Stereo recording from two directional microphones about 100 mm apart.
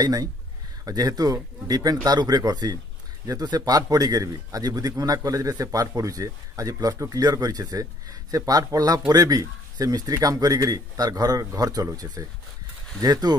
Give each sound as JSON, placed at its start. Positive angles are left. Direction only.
{"t": 0.0, "sound": "a man's voice", "side_deg": -40}